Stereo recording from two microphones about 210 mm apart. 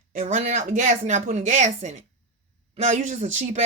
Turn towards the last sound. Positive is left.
turn(degrees=-35)  # may be behind; listen again after turning